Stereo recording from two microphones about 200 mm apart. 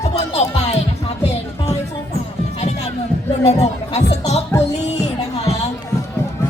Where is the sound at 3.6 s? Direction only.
35° left (ahead or behind).